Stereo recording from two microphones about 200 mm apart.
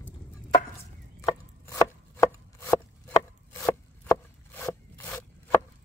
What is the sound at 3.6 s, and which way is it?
Zipper, 15° left (ahead or behind).